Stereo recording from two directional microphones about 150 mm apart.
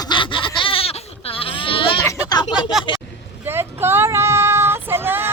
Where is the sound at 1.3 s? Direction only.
35° left (ahead or behind).